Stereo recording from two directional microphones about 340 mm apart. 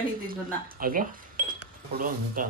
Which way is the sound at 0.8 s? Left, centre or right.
Right.